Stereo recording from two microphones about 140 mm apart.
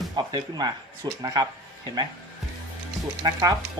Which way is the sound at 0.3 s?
30° right (ahead or behind).